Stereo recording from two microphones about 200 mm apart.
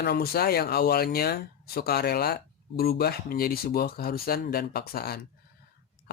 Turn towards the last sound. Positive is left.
turn(degrees=50)  # may be behind; listen again after turning